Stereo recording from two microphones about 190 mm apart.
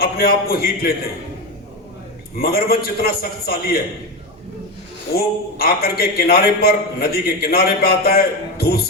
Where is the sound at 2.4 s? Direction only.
50° left (ahead or behind).